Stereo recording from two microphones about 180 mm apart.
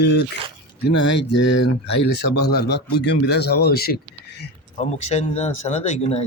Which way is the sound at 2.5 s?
65° left (ahead or behind).